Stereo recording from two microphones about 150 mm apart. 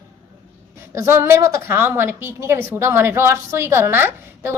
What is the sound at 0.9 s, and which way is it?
A woman's voice, 20° right (ahead or behind).